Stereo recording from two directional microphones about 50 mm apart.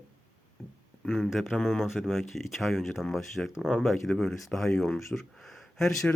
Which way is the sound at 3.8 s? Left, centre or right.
Centre.